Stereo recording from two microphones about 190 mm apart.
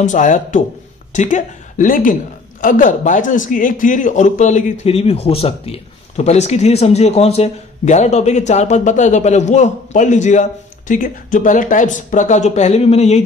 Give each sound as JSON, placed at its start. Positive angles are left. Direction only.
{"t": 0.0, "sound": "a man's voice", "side_deg": 40}